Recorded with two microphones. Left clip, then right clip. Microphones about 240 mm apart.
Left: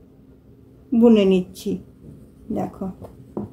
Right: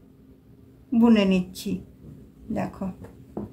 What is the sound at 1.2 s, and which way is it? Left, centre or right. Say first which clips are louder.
Speech: left 6 dB; right.